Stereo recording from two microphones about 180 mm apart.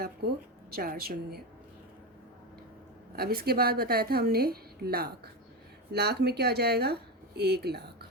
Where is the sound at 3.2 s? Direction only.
60° right (ahead or behind).